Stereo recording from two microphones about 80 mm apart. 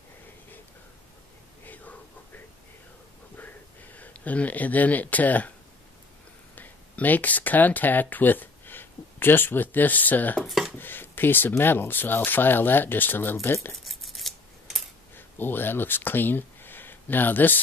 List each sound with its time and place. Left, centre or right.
1.7 s a sound: left
6.5 s speech: left
10.4 s speech: centre
10.8 s speech: left
13.8 s scissors: centre
15.1 s speech: left